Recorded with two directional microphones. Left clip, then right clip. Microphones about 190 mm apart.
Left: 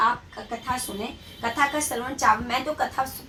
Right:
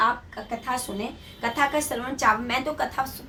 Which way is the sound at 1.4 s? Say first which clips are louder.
Even; 25° right (ahead or behind).